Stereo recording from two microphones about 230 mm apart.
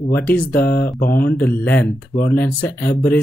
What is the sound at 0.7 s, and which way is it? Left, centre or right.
Speech, left.